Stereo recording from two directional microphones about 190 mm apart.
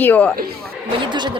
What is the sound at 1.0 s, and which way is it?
Speech, 25° right (ahead or behind).